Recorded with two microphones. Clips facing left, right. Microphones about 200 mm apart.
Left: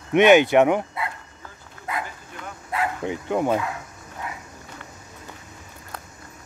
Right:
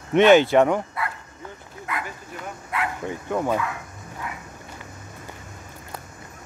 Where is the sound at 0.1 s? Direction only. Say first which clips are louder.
Even; 15° left (ahead or behind).